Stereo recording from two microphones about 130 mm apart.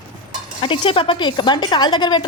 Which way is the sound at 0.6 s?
45° left (ahead or behind).